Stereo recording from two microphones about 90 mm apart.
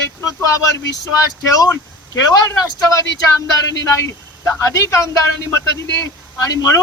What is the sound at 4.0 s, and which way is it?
Speech, 35° left (ahead or behind).